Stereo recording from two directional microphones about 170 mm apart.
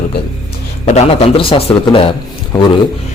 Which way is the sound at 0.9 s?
40° left (ahead or behind).